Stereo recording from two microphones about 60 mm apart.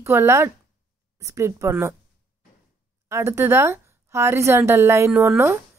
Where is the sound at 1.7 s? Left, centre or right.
Right.